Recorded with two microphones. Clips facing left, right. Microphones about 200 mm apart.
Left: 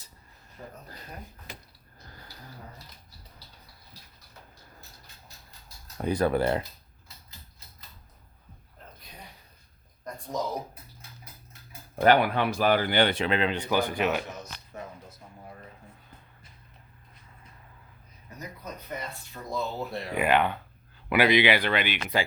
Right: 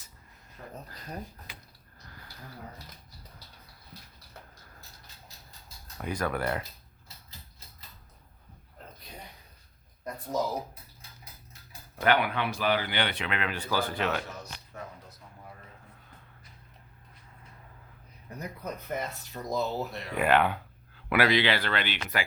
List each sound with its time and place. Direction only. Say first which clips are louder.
0.6 s speech: left 2 dB; 25° left (ahead or behind)
6.0 s speech: left 6 dB; 30° left (ahead or behind)
10.3 s speech: right 2 dB; 5° right (ahead or behind)
12.0 s speech: left 5 dB; 40° left (ahead or behind)
13.6 s speech: left 4 dB; 15° left (ahead or behind)
18.3 s speech: right 3 dB; 60° right (ahead or behind)
19.3 s speech: right 2 dB; 40° right (ahead or behind)
19.9 s speech: left 5 dB; 30° left (ahead or behind)
20.1 s speech: even; centre (ahead or behind)
21.2 s speech: left 3 dB; 15° left (ahead or behind)